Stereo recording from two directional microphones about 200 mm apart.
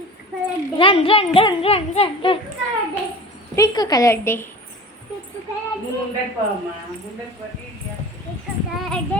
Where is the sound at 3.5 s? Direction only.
15° left (ahead or behind).